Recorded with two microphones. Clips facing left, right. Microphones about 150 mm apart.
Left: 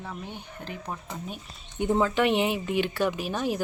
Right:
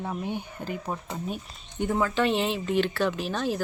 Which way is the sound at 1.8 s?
20° left (ahead or behind).